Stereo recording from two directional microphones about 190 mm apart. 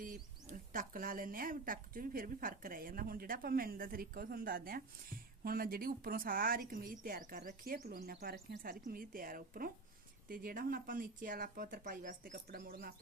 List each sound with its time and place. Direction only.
0.0 s speech: 45° right (ahead or behind)